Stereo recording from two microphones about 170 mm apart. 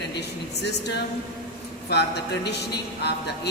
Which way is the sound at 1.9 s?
80° left.